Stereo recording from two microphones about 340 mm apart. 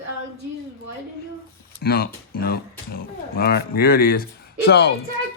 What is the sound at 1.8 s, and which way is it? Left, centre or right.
Speech, left.